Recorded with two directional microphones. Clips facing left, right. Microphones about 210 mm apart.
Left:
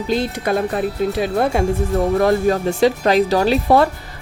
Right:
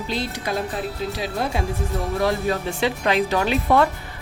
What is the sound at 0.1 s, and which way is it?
Speech, 50° left (ahead or behind).